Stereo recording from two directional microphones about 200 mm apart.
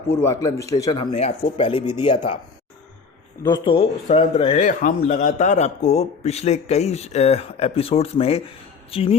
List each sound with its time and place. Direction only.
0.1 s a man's voice: 15° left (ahead or behind)
1.1 s speech: 30° left (ahead or behind)
3.4 s speech: 20° left (ahead or behind)
4.6 s a man's voice: 40° left (ahead or behind)